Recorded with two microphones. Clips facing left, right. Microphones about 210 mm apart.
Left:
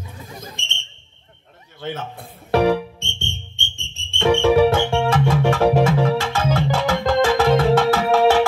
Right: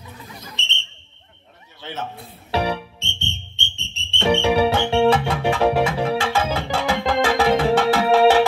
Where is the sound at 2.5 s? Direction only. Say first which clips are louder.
Left 7 dB; 50° left (ahead or behind).